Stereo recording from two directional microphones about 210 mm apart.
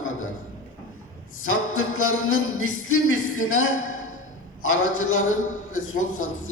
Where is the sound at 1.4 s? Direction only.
75° left (ahead or behind).